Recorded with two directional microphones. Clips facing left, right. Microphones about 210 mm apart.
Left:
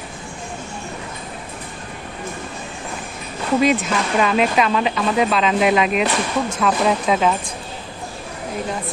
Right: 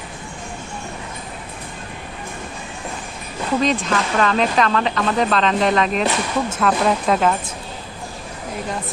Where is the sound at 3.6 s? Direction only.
5° left (ahead or behind).